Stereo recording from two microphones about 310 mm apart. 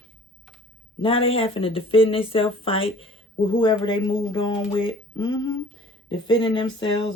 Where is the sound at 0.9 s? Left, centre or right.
Centre.